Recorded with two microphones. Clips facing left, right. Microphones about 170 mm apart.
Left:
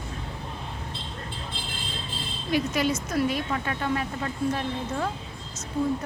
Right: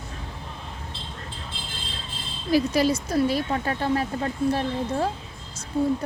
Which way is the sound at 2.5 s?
35° right (ahead or behind).